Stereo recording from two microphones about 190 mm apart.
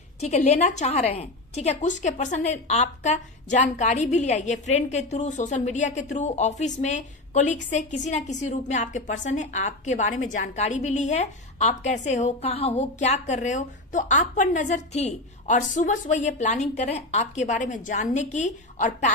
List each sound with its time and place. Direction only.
0.2 s a woman's voice: 35° left (ahead or behind)